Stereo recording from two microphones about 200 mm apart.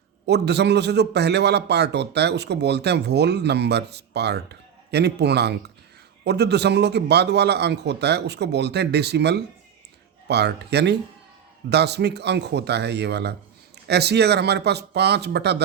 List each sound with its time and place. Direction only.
0.3 s a man's voice: 55° right (ahead or behind)